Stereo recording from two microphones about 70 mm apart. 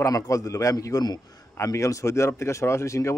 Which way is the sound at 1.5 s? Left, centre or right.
Left.